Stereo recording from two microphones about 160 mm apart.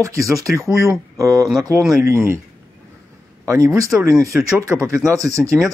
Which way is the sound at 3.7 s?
20° right (ahead or behind).